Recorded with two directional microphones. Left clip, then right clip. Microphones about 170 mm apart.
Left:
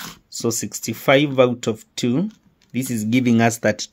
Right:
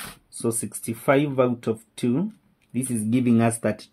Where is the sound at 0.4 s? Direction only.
50° left (ahead or behind).